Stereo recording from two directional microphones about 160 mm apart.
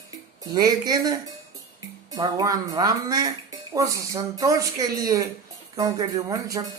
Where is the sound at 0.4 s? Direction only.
25° right (ahead or behind).